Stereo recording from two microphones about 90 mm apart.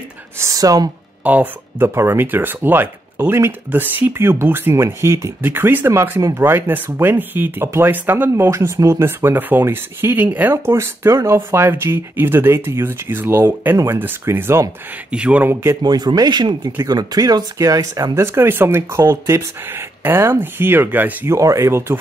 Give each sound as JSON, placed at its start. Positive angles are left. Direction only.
{"t": 0.4, "sound": "speech", "side_deg": -40}
{"t": 1.2, "sound": "speech", "side_deg": -20}
{"t": 15.0, "sound": "speech", "side_deg": -15}
{"t": 15.8, "sound": "speech", "side_deg": -55}
{"t": 21.4, "sound": "speech", "side_deg": -35}